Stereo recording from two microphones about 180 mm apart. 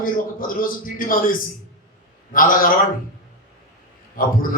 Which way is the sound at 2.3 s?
50° left (ahead or behind).